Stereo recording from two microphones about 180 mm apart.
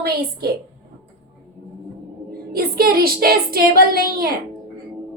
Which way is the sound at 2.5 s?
60° right (ahead or behind).